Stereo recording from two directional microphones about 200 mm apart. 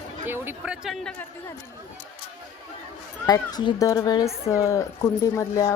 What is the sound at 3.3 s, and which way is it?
Speech, 20° left (ahead or behind).